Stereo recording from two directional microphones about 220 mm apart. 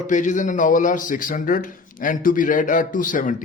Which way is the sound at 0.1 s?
35° left (ahead or behind).